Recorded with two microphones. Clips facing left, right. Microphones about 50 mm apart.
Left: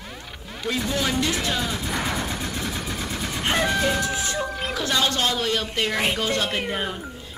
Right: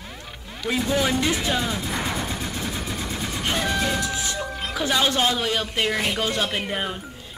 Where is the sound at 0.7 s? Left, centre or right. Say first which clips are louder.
Right 3 dB; centre.